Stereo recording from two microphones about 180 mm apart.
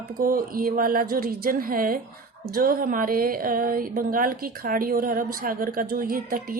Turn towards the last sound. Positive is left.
turn(degrees=-55)  # may be behind; listen again after turning